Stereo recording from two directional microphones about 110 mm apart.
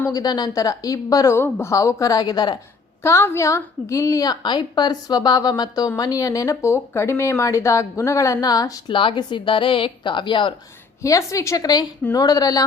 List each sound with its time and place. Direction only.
0.1 s a woman's voice: 35° left (ahead or behind)
3.0 s a woman's voice: 25° left (ahead or behind)
8.9 s a woman's voice: 50° left (ahead or behind)
11.0 s a woman's voice: 30° left (ahead or behind)